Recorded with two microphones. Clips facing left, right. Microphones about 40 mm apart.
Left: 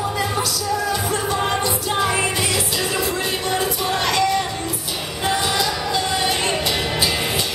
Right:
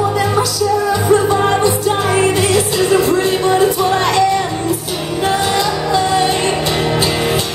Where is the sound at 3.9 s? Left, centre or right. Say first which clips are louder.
Right 6 dB; right.